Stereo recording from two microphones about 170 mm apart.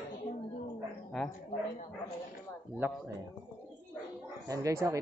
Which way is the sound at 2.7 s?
15° right (ahead or behind).